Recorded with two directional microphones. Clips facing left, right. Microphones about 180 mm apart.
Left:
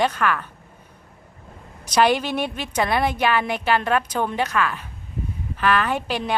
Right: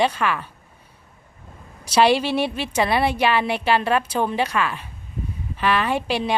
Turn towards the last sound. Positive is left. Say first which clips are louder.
# right 2 dB
turn(degrees=-10)  # may be behind; listen again after turning